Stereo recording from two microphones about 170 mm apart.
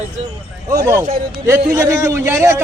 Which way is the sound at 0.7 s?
20° right (ahead or behind).